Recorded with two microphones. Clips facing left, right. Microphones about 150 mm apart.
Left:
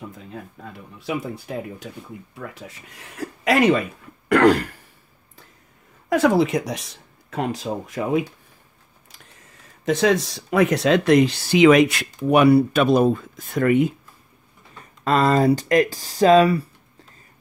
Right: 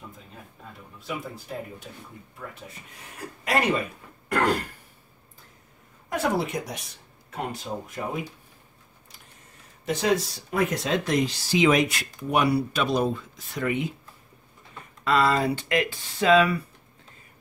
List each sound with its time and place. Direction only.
0.9 s speech: 80° left
2.3 s speech: 90° left
6.0 s speech: 90° left
9.8 s speech: 90° left; by 13.8 s 50° left (ahead or behind)
15.0 s speech: 40° left (ahead or behind)